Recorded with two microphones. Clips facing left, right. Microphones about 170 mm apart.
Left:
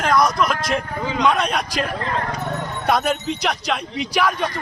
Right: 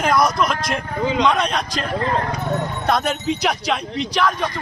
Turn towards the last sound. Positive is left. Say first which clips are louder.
# even
turn(degrees=10)  # may be behind; listen again after turning